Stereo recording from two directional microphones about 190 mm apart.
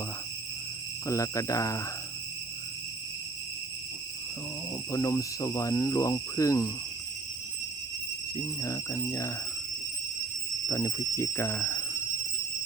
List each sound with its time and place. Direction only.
1.0 s speech: 15° left (ahead or behind)
4.9 s speech: 15° left (ahead or behind)
8.4 s speech: 15° left (ahead or behind)
10.7 s speech: 15° left (ahead or behind)